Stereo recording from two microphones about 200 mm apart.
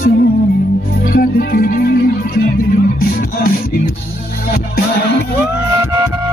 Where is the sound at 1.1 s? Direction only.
50° left (ahead or behind).